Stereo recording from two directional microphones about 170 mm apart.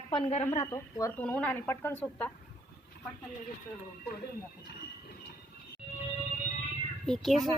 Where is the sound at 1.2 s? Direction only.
5° left (ahead or behind).